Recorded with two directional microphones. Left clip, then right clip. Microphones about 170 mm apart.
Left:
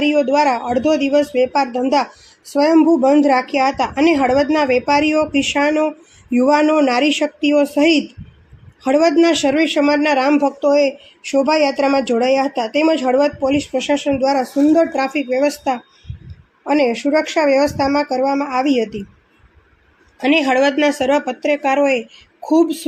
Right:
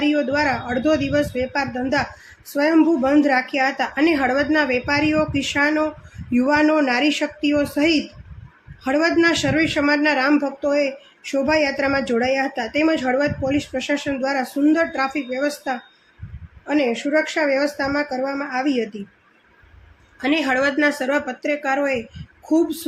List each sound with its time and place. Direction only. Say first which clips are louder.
0.0 s speech: left 5 dB; 25° left (ahead or behind)
20.1 s speech: left 5 dB; 30° left (ahead or behind)